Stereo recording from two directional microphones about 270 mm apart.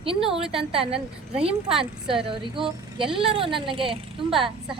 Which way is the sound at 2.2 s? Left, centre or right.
Centre.